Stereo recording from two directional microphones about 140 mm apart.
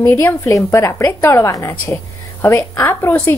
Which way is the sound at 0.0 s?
15° left (ahead or behind).